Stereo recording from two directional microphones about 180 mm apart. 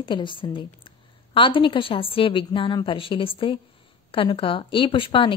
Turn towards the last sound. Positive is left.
turn(degrees=30)  # may be behind; listen again after turning